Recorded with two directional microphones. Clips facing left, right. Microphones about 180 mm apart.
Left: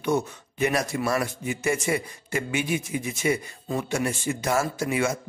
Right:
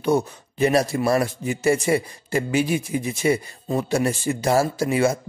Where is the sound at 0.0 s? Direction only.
35° right (ahead or behind).